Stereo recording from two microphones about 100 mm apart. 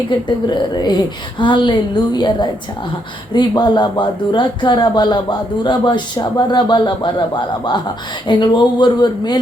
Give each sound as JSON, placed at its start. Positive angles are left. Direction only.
{"t": 0.4, "sound": "speech", "side_deg": 45}